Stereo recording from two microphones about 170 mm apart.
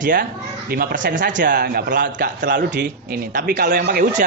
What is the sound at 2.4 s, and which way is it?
Speech, 90° right.